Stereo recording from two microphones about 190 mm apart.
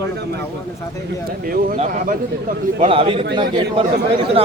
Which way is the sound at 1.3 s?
50° right (ahead or behind).